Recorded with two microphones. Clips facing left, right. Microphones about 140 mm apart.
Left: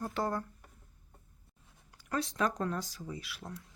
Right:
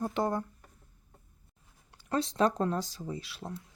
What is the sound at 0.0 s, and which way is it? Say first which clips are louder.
Speech: right 4 dB; 20° right (ahead or behind).